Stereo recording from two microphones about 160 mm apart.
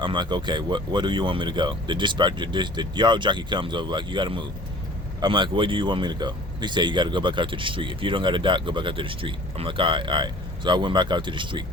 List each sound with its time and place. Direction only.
0.0 s speech: 30° right (ahead or behind)